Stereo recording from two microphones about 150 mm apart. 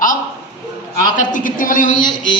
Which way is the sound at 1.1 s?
60° left (ahead or behind).